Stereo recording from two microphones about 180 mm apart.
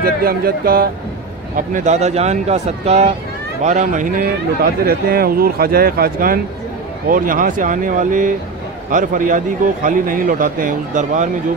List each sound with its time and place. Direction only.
0.0 s a man's voice: 55° right (ahead or behind)
1.7 s a man's voice: 40° right (ahead or behind)